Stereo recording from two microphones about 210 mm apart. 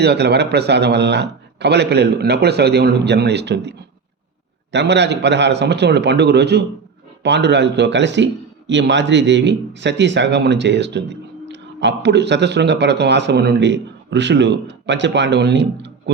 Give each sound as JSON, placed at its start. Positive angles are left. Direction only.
{"t": 0.0, "sound": "a man's voice", "side_deg": -50}